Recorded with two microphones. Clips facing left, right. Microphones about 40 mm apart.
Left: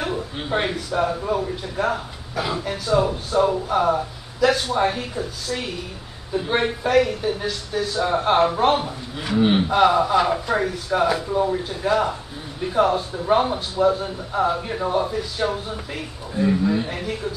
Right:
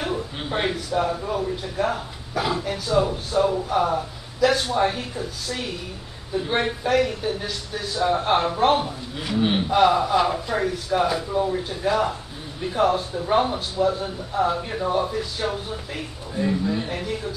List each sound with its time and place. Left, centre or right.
0.0 s a sound: centre
1.0 s a man's voice: centre
13.8 s a man's voice: left
14.4 s speech: centre